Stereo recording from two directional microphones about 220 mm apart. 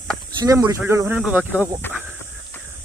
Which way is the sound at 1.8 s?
10° left (ahead or behind).